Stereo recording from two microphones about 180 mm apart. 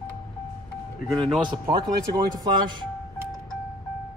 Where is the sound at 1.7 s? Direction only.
25° right (ahead or behind).